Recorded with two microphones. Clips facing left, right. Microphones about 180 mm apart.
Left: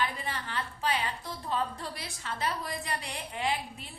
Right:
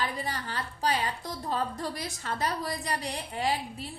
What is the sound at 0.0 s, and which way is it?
A woman's voice, 40° right (ahead or behind).